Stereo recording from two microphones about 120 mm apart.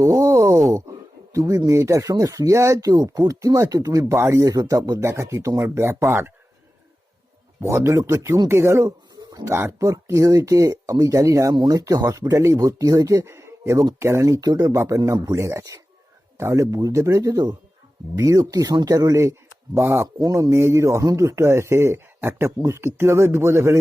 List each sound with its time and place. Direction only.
0.2 s a sound: 25° right (ahead or behind)
0.7 s speech: 25° right (ahead or behind)
7.6 s speech: 25° right (ahead or behind)